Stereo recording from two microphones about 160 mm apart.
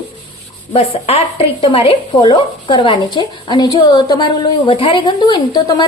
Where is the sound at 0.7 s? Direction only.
40° left (ahead or behind).